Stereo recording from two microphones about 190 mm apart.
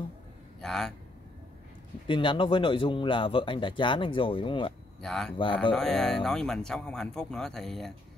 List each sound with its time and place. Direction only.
0.6 s a man's voice: centre (ahead or behind)
2.0 s speech: 25° left (ahead or behind)
5.0 s speech: centre (ahead or behind)
5.4 s speech: 25° left (ahead or behind)
5.7 s speech: 5° left (ahead or behind)